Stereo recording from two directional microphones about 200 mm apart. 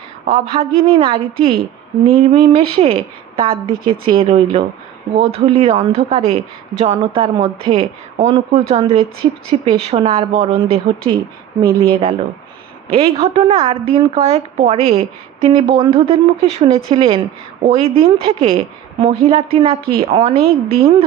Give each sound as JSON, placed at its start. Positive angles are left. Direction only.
{"t": 0.3, "sound": "a woman's voice", "side_deg": -35}